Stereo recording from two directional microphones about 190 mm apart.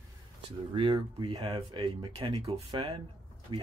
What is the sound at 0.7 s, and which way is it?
Speech, 25° right (ahead or behind).